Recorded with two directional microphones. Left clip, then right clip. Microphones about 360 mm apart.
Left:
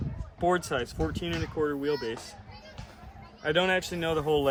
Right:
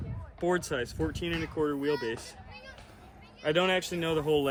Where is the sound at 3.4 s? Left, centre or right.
Centre.